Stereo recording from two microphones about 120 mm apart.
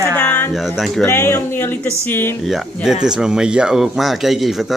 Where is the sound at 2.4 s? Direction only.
Centre (ahead or behind).